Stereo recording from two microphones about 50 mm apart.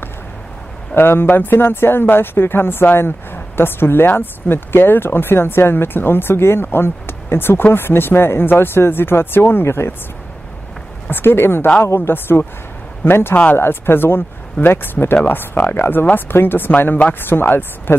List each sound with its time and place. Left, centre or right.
0.9 s speech: left
11.1 s speech: left
11.8 s a man's voice: left
12.1 s speech: left